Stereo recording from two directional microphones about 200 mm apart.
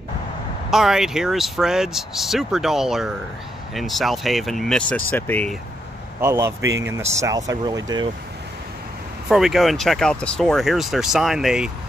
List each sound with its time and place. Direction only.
0.7 s speech: centre (ahead or behind)
6.2 s speech: 15° right (ahead or behind)
9.3 s speech: centre (ahead or behind)